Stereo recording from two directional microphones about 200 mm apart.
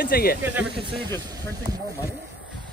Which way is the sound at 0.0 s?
50° left (ahead or behind).